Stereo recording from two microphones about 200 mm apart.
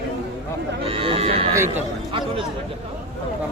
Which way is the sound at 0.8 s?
25° right (ahead or behind).